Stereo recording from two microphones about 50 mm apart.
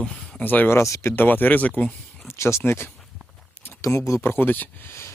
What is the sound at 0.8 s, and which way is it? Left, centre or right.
Speech, left.